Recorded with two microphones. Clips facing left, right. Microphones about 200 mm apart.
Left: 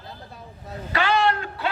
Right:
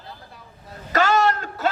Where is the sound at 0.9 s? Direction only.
45° right (ahead or behind).